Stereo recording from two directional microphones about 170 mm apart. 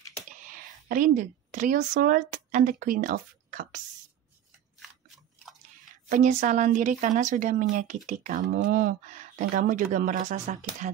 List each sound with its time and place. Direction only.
0.3 s a woman's voice: 50° right (ahead or behind)
6.0 s speech: 50° right (ahead or behind)
8.5 s speech: 70° right (ahead or behind); by 10.9 s 45° right (ahead or behind)